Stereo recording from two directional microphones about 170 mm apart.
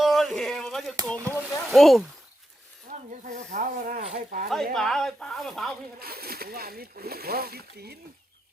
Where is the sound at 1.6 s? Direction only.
Centre (ahead or behind).